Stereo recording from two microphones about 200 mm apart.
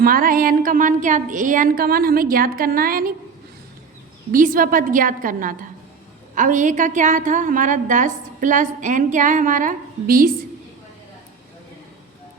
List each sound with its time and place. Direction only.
0.0 s a woman's voice: 45° right (ahead or behind)
4.3 s a woman's voice: 45° right (ahead or behind)